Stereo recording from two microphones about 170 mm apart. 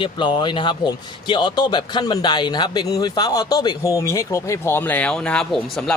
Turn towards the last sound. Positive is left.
turn(degrees=5)  # may be behind; listen again after turning